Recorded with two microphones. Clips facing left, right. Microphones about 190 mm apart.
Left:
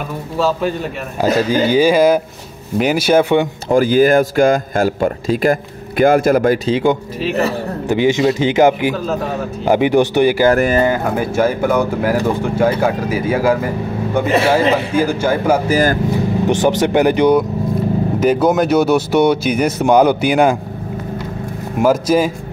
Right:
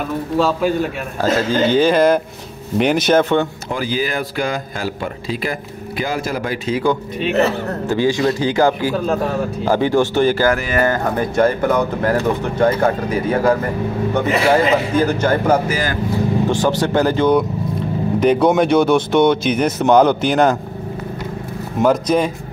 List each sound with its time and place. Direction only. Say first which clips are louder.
1.2 s speech: left 2 dB; 10° left (ahead or behind)
3.7 s speech: left 11 dB; 50° left (ahead or behind)
6.6 s a man's voice: left 3 dB; 25° left (ahead or behind)
10.5 s speech: left 6 dB; 40° left (ahead or behind)
10.8 s speech: left 2 dB; 10° left (ahead or behind)
15.7 s speech: left 7 dB; 45° left (ahead or behind)
16.4 s speech: left 3 dB; 20° left (ahead or behind)
18.2 s speech: right 1 dB; 5° left (ahead or behind)
21.7 s speech: left 2 dB; 5° left (ahead or behind)